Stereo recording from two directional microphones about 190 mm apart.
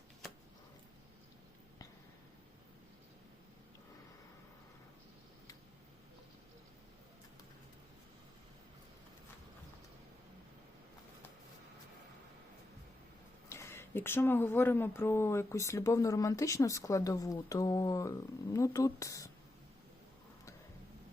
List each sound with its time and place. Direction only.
13.5 s speech: 15° left (ahead or behind)